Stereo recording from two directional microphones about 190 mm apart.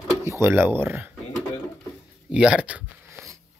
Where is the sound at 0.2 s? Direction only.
15° right (ahead or behind).